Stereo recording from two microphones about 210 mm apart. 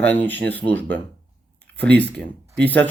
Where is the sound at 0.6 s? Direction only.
60° right (ahead or behind).